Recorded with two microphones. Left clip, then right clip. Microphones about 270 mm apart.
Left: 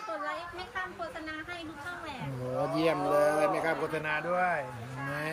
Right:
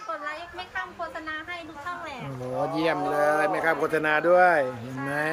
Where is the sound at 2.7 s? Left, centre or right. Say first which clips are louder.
Right 2 dB; centre.